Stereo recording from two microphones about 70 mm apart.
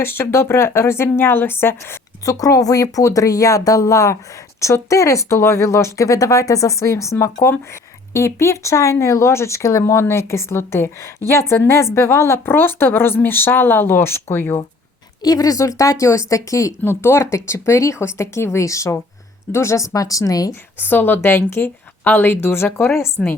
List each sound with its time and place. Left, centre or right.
0.0 s a woman's voice: left
2.2 s a woman's voice: left
15.2 s speech: left
16.8 s a woman's voice: left
20.5 s a woman's voice: left
23.2 s a woman's voice: centre